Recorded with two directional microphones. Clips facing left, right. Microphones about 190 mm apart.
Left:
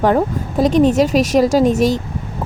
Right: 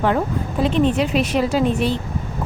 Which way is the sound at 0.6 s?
40° left (ahead or behind).